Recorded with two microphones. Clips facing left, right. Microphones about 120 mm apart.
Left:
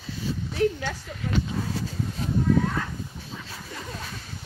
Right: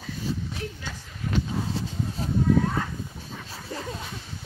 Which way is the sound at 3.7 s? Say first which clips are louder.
Right 5 dB; 35° right (ahead or behind).